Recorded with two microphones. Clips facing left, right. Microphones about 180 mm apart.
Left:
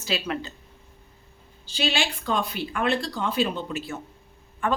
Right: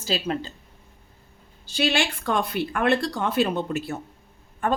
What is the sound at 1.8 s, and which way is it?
Speech, 50° right (ahead or behind).